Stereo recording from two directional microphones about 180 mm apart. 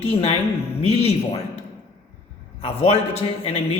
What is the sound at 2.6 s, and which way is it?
Speech, 35° left (ahead or behind).